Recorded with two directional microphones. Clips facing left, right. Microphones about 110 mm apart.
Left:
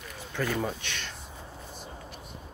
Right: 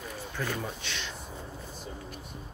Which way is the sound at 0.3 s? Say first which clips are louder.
Left 5 dB; 90° left.